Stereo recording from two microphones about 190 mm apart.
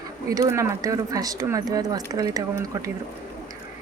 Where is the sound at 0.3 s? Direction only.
15° right (ahead or behind).